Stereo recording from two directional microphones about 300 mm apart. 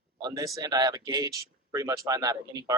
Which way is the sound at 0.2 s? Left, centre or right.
Centre.